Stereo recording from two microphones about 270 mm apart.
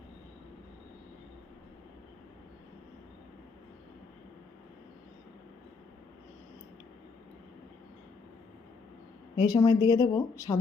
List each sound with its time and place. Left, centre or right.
9.3 s a woman's voice: centre